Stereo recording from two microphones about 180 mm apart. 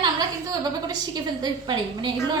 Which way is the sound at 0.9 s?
20° right (ahead or behind).